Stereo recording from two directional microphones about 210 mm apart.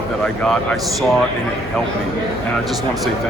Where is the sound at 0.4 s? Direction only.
Centre (ahead or behind).